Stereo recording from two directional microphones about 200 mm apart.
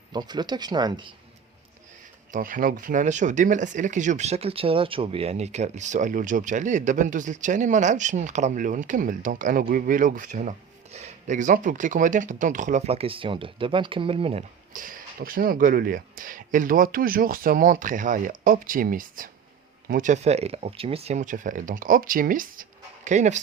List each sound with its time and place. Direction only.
0.1 s speech: 20° right (ahead or behind)
2.3 s speech: 45° right (ahead or behind); by 14.4 s 30° right (ahead or behind)
14.7 s speech: 40° right (ahead or behind)